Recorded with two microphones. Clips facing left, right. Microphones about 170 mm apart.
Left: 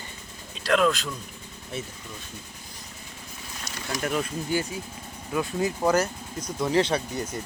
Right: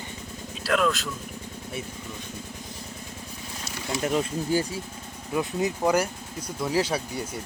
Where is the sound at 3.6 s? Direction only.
25° right (ahead or behind).